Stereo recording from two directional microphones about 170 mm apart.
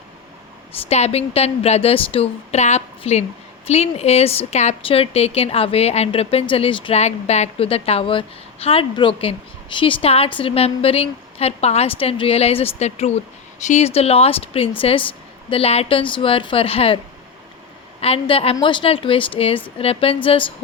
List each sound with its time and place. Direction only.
0.9 s a woman's voice: 40° left (ahead or behind)
18.0 s a woman's voice: 35° left (ahead or behind)